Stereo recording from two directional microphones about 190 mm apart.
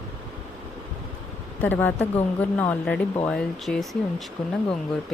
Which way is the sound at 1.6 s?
10° left (ahead or behind).